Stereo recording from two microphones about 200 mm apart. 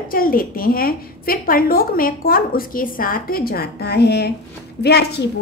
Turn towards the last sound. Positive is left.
turn(degrees=55)  # may be behind; listen again after turning